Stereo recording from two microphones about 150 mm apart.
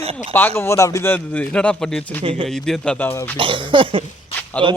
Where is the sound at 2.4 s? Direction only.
5° left (ahead or behind).